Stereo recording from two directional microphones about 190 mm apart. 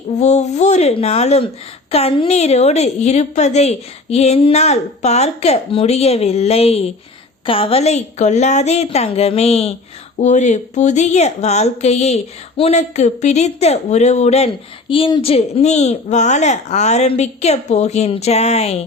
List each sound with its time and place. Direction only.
0.2 s a woman's voice: 35° left (ahead or behind)